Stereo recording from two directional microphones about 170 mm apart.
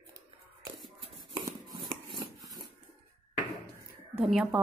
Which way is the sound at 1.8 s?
25° right (ahead or behind).